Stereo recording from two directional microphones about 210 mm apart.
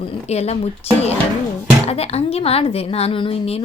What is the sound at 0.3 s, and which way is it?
A woman's voice, 30° left (ahead or behind).